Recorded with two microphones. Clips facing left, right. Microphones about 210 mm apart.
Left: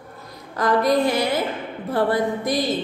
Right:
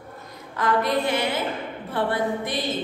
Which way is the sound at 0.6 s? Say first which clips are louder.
Left 4 dB; 40° left (ahead or behind).